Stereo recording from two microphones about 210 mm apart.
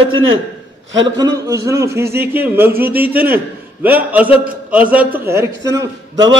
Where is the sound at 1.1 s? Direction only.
15° right (ahead or behind).